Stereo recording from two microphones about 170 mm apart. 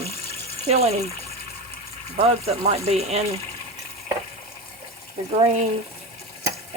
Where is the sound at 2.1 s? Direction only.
35° right (ahead or behind).